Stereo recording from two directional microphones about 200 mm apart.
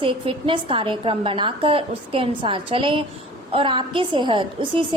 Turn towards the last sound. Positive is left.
turn(degrees=-25)  # may be behind; listen again after turning